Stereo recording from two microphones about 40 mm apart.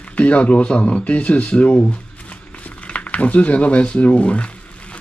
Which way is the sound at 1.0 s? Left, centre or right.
Left.